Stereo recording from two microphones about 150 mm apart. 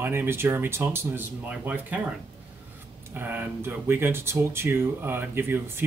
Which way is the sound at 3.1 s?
15° right (ahead or behind).